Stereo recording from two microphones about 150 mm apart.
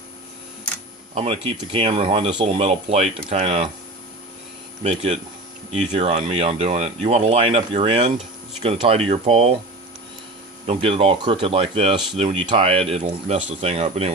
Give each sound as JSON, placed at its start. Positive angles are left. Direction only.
{"t": 1.1, "sound": "speech", "side_deg": -45}
{"t": 4.8, "sound": "speech", "side_deg": -50}
{"t": 10.7, "sound": "speech", "side_deg": -40}